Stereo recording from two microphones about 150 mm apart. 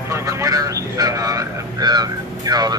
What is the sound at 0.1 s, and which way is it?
A man's voice, 20° right (ahead or behind).